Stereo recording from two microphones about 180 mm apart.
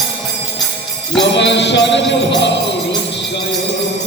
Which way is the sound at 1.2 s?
75° left (ahead or behind).